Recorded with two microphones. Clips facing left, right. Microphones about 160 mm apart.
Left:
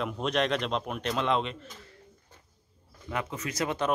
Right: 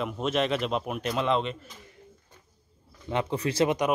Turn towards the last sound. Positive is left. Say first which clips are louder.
# right 7 dB
turn(degrees=-30)  # may be behind; listen again after turning